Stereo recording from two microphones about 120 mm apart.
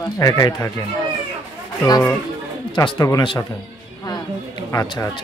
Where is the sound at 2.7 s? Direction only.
35° left (ahead or behind).